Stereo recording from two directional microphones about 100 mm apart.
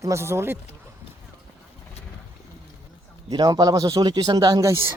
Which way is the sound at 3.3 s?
45° right (ahead or behind).